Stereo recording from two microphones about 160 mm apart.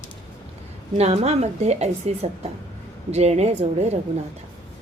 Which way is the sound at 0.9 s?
45° right (ahead or behind).